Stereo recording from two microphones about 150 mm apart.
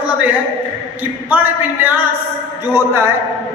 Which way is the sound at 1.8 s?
15° right (ahead or behind).